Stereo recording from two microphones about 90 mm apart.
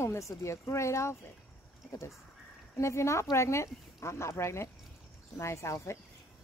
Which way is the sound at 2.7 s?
30° left (ahead or behind).